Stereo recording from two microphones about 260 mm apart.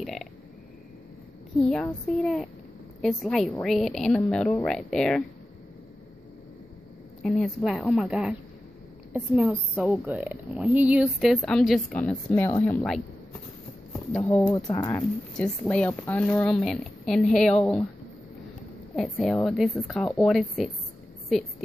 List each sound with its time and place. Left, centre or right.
0.0 s burping: centre
1.6 s a woman's voice: centre
7.2 s a woman's voice: centre
14.1 s a woman's voice: centre
18.9 s a woman's voice: centre